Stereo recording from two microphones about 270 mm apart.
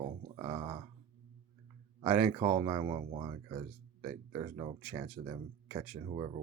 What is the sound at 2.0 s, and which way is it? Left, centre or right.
Speech, centre.